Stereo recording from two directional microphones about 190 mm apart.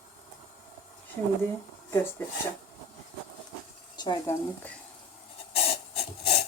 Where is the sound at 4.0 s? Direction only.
20° left (ahead or behind).